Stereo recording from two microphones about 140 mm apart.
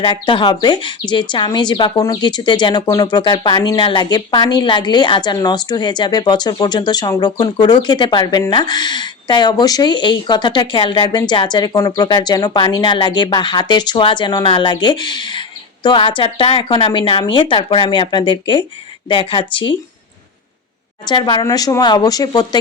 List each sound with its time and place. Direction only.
0.0 s speech: 35° left (ahead or behind)
21.1 s speech: 35° left (ahead or behind)